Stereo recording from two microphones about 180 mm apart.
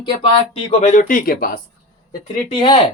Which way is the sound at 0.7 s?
40° left (ahead or behind).